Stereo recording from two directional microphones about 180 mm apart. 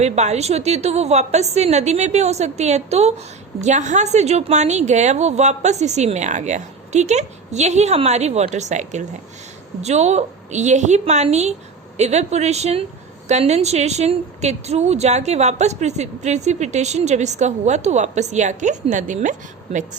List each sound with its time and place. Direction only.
0.0 s a woman's voice: 40° right (ahead or behind)